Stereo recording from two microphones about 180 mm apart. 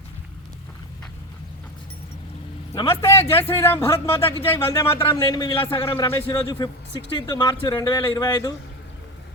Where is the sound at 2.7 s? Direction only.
15° left (ahead or behind).